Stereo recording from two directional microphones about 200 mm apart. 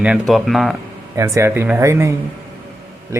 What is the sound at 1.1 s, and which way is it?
Speech, 15° right (ahead or behind).